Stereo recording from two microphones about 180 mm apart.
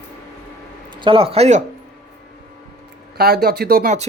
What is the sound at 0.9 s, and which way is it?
Speech, 25° right (ahead or behind).